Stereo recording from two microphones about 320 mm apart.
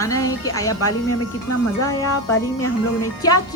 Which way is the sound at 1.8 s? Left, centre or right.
Centre.